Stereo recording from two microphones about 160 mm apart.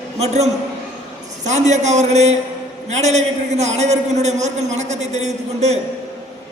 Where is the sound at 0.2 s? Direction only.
45° right (ahead or behind).